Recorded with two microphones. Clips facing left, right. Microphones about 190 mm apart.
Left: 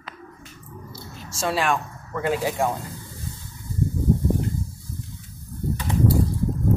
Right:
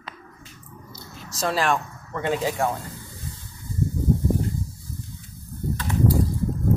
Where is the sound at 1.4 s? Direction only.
Centre (ahead or behind).